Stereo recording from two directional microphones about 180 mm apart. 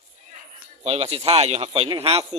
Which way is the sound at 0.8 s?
35° right (ahead or behind).